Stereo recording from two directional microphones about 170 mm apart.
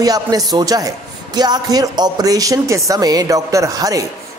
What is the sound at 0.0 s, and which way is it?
A man's voice, 20° right (ahead or behind).